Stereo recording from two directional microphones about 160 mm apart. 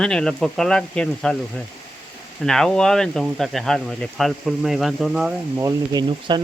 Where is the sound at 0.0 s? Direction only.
5° left (ahead or behind).